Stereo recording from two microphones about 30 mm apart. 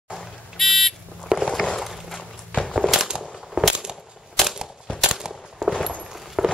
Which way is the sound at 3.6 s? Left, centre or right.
Right.